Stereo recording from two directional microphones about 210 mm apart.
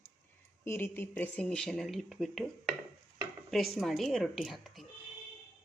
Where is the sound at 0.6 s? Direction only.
10° left (ahead or behind).